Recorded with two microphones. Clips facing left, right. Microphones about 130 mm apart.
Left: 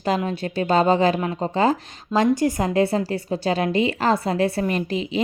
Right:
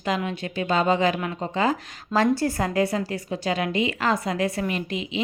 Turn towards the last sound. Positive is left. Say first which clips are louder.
# left 5 dB
turn(degrees=35)  # may be behind; listen again after turning